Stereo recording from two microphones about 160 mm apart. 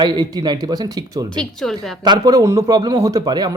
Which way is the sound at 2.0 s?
25° right (ahead or behind).